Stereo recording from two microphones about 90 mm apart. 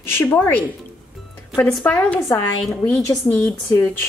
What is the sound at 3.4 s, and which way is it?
Speech, 15° left (ahead or behind).